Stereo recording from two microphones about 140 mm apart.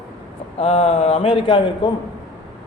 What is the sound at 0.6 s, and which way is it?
A man's voice, 45° left (ahead or behind).